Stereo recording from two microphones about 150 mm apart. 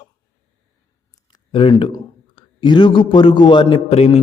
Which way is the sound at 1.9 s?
30° left (ahead or behind).